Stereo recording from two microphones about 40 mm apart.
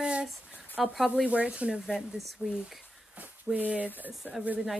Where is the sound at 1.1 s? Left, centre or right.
Right.